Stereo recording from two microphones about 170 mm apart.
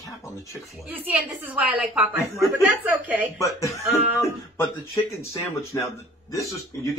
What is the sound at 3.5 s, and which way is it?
Speech, 20° left (ahead or behind).